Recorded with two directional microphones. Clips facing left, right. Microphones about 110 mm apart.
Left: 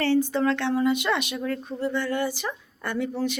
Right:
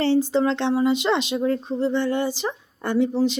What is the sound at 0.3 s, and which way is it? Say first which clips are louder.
Speech: right 3 dB; 20° right (ahead or behind).